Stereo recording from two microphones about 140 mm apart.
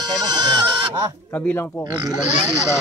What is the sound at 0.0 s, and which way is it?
Goat, 30° right (ahead or behind).